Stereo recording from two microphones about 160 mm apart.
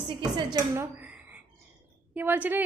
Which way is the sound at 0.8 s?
10° right (ahead or behind).